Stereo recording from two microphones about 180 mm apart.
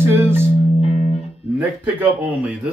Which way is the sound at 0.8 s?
35° left (ahead or behind).